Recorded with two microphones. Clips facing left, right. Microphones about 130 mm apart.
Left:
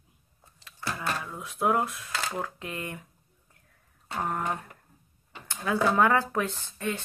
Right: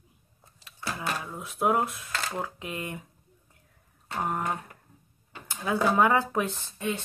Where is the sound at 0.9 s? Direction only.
10° right (ahead or behind).